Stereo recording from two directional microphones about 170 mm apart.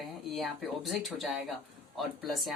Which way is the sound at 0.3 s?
Centre (ahead or behind).